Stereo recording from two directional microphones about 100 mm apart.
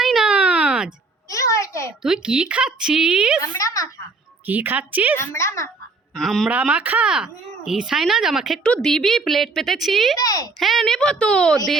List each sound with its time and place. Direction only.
0.0 s a sound: 5° right (ahead or behind)
1.3 s a sound: 35° left (ahead or behind)
2.0 s speech: 5° right (ahead or behind)
4.4 s speech: 20° right (ahead or behind)
5.1 s a woman's voice: 25° left (ahead or behind)
6.1 s speech: centre (ahead or behind)
6.5 s speech: 15° right (ahead or behind)
10.2 s speech: 40° left (ahead or behind)
10.6 s speech: centre (ahead or behind)